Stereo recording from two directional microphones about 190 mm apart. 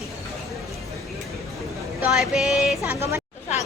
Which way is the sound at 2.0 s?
Centre (ahead or behind).